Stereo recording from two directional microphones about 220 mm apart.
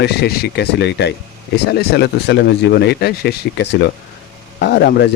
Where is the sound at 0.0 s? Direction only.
50° left (ahead or behind).